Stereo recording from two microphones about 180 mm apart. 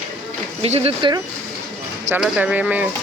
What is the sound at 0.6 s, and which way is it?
Speech, 35° right (ahead or behind).